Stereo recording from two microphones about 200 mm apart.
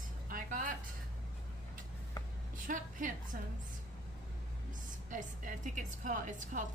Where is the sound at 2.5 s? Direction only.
40° right (ahead or behind).